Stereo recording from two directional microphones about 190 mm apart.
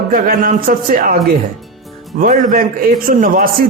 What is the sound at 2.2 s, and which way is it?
Speech, 45° right (ahead or behind).